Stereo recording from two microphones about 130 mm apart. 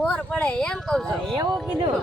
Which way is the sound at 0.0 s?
10° left (ahead or behind).